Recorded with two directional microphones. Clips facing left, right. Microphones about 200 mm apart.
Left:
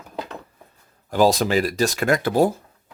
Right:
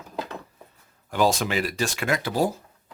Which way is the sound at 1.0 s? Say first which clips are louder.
Left 5 dB; 35° left (ahead or behind).